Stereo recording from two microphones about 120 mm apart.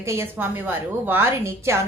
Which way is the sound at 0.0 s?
20° right (ahead or behind).